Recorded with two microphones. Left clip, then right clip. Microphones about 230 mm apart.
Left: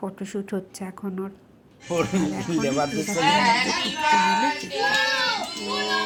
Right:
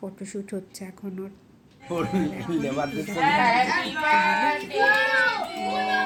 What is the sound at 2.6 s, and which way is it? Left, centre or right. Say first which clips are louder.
Speech: left 4 dB; left.